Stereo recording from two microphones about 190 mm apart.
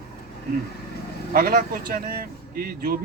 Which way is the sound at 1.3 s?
50° right (ahead or behind).